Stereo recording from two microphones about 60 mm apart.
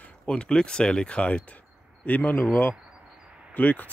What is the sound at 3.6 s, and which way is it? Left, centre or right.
Speech, left.